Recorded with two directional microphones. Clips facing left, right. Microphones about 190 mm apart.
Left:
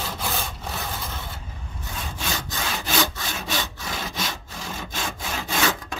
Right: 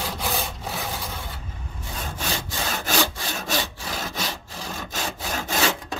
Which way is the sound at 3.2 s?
40° right (ahead or behind).